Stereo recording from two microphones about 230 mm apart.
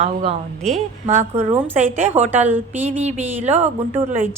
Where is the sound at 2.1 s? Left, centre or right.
Centre.